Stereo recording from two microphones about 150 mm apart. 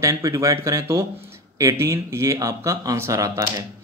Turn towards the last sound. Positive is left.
turn(degrees=-20)  # may be behind; listen again after turning